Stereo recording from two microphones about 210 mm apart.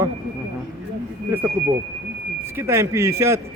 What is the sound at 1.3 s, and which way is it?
Speech, 10° right (ahead or behind).